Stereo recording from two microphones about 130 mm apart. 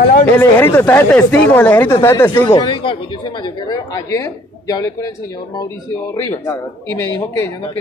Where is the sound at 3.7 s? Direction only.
25° left (ahead or behind).